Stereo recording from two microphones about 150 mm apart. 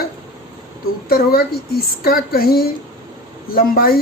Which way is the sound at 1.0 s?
90° left.